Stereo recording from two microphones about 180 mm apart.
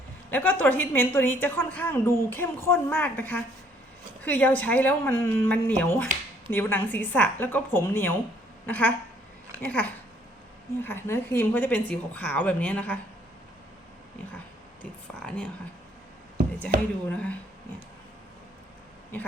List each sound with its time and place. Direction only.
0.3 s a woman's voice: 10° left (ahead or behind)
14.8 s speech: 5° left (ahead or behind)
17.1 s a woman's voice: 5° left (ahead or behind)